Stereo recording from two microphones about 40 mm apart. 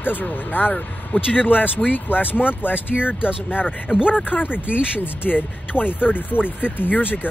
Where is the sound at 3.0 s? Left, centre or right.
Right.